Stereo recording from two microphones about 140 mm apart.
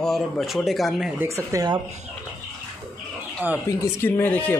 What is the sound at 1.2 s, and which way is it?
Speech, 20° right (ahead or behind).